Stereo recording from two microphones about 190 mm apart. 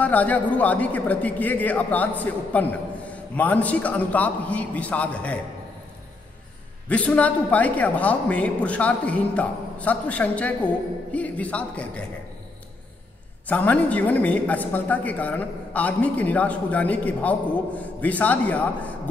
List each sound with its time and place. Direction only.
0.0 s a woman's voice: 10° left (ahead or behind)
6.9 s a woman's voice: 5° left (ahead or behind)
13.5 s a woman's voice: 10° left (ahead or behind)